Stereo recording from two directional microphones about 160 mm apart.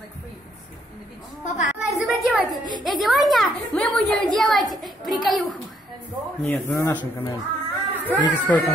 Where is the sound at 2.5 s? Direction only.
25° right (ahead or behind).